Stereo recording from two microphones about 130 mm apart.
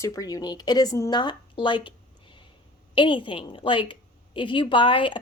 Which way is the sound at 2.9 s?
40° left (ahead or behind).